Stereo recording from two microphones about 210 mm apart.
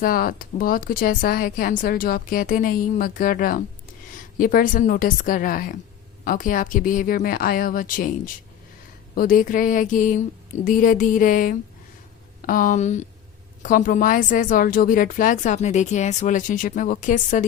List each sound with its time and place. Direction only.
0.0 s a woman's voice: 45° left (ahead or behind)